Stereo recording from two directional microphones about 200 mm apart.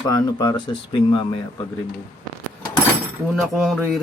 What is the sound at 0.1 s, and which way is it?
Speech, 20° left (ahead or behind).